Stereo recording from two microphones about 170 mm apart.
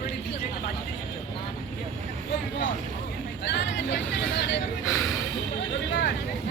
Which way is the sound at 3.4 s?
90° left.